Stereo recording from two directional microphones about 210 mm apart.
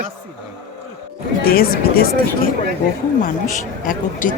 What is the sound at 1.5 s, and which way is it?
Speech, 45° left (ahead or behind).